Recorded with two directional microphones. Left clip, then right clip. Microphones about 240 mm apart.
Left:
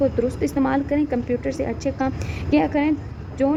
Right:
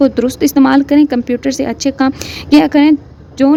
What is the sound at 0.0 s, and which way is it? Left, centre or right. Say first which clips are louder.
A woman's voice: right 9 dB; right.